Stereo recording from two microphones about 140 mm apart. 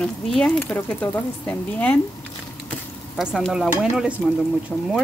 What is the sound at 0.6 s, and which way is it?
Speech, 15° left (ahead or behind).